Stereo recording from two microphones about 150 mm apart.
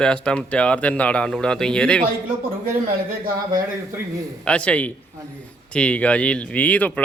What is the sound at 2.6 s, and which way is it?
Speech, 70° right (ahead or behind).